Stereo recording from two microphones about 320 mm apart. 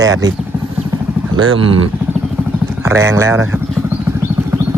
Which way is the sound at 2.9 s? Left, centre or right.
Centre.